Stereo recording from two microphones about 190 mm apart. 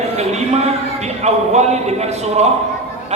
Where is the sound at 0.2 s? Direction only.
35° right (ahead or behind).